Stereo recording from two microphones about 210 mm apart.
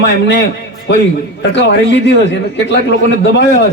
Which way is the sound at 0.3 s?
55° left (ahead or behind).